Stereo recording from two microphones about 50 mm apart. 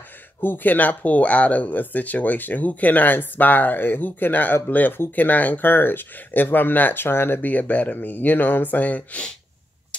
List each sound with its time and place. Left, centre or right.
0.4 s speech: left
7.4 s speech: left